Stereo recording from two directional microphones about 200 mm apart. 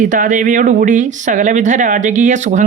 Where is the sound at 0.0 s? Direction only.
40° right (ahead or behind).